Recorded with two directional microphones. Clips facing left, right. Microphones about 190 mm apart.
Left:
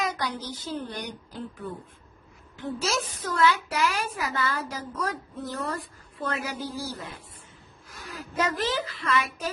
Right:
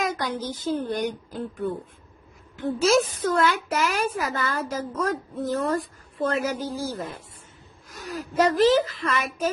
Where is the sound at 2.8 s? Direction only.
50° right (ahead or behind).